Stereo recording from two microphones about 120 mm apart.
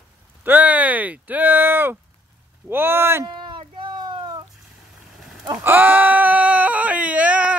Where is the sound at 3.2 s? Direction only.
40° right (ahead or behind).